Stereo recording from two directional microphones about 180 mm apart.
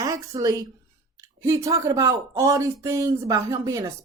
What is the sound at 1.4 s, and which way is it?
Speech, 15° right (ahead or behind).